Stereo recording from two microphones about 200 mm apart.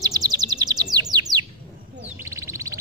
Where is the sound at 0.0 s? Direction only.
20° right (ahead or behind).